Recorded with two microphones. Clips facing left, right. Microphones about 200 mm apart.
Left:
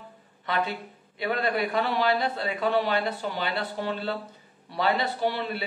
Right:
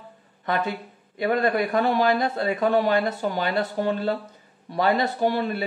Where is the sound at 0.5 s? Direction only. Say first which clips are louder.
Right 3 dB; 45° right (ahead or behind).